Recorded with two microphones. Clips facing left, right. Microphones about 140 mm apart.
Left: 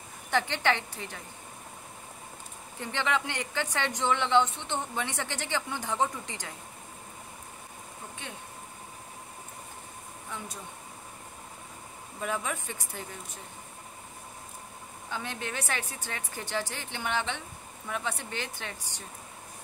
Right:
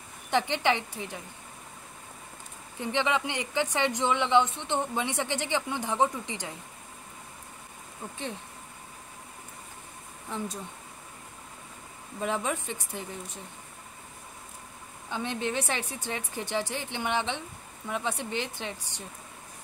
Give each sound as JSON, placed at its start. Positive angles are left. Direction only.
{"t": 0.3, "sound": "speech", "side_deg": -20}
{"t": 2.8, "sound": "speech", "side_deg": -20}
{"t": 12.2, "sound": "a woman's voice", "side_deg": -25}
{"t": 15.0, "sound": "a woman's voice", "side_deg": -25}